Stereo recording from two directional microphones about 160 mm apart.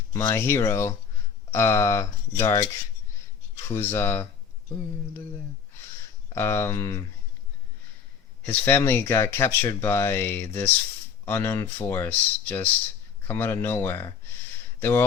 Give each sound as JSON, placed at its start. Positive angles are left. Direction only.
{"t": 0.1, "sound": "speech", "side_deg": 20}
{"t": 3.7, "sound": "speech", "side_deg": 15}
{"t": 6.3, "sound": "speech", "side_deg": 15}
{"t": 8.4, "sound": "speech", "side_deg": 15}